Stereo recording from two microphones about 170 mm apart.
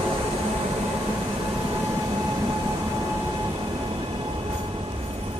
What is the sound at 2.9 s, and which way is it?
Train, 25° right (ahead or behind).